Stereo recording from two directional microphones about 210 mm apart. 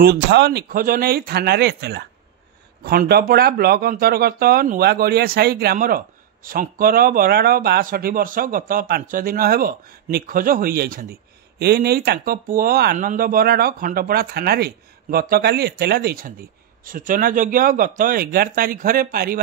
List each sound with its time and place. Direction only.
0.0 s speech: 50° right (ahead or behind)